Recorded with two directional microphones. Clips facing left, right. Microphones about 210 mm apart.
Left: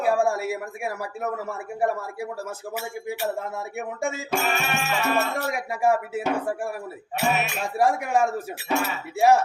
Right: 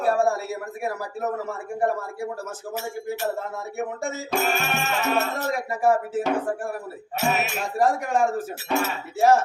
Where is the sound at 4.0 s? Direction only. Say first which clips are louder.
Left 1 dB; 40° right (ahead or behind).